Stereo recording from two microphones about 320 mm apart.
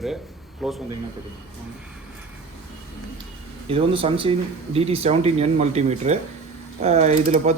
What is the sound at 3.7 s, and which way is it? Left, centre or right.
Speech, centre.